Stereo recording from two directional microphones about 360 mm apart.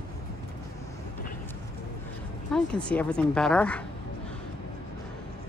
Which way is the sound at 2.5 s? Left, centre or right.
Centre.